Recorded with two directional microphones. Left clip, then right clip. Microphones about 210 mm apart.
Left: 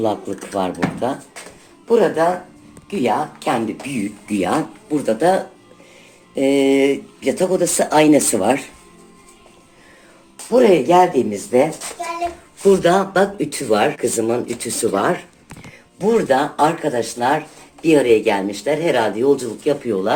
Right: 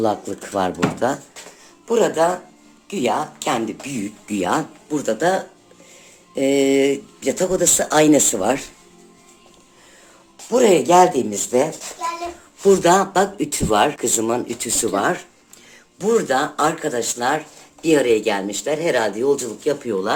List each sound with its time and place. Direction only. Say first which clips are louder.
0.0 s speech: even; 30° right (ahead or behind)
1.9 s speech: left 2 dB; 10° right (ahead or behind)
10.5 s speech: left 1 dB; 10° right (ahead or behind)
16.0 s speech: left 2 dB; centre (ahead or behind)